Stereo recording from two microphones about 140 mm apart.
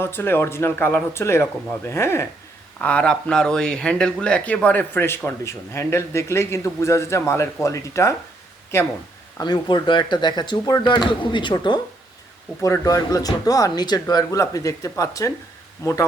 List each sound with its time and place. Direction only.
0.0 s speech: 15° left (ahead or behind)
2.8 s speech: 10° left (ahead or behind)
9.4 s speech: 30° left (ahead or behind)